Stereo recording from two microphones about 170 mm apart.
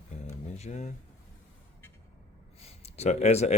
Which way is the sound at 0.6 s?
45° left (ahead or behind).